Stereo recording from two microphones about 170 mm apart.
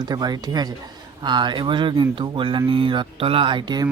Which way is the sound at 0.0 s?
25° right (ahead or behind).